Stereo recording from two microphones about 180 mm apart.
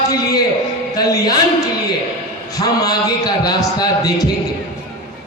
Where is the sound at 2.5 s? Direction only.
20° left (ahead or behind).